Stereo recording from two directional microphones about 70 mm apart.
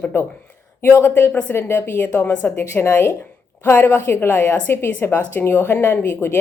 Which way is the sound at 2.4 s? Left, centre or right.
Left.